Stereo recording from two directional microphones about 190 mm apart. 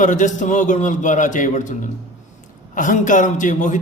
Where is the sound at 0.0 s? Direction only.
40° left (ahead or behind).